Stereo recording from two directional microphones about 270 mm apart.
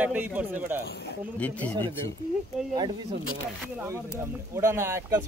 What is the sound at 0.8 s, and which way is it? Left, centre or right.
Speech, left.